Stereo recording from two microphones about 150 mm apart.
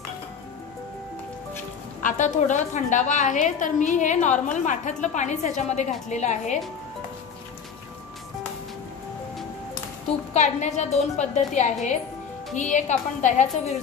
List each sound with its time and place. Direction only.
2.0 s a woman's voice: 60° left (ahead or behind)
10.0 s a woman's voice: 50° left (ahead or behind)